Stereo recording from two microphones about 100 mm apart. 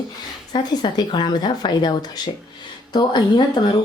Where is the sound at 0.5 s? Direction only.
45° left (ahead or behind).